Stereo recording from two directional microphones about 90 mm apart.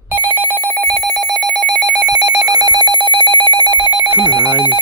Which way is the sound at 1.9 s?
45° right (ahead or behind).